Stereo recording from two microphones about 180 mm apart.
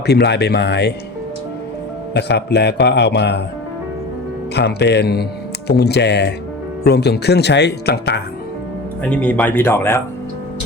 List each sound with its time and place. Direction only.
0.0 s a man's voice: 65° left (ahead or behind)
2.1 s a man's voice: 70° left (ahead or behind)
4.5 s a man's voice: 70° left (ahead or behind)
9.0 s speech: 5° left (ahead or behind)